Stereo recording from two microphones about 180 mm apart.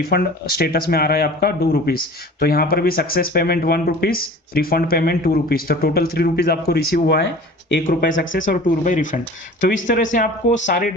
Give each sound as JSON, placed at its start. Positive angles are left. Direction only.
{"t": 0.0, "sound": "speech", "side_deg": 60}
{"t": 7.9, "sound": "speech", "side_deg": 45}